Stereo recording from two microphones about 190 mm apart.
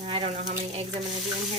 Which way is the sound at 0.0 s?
35° right (ahead or behind).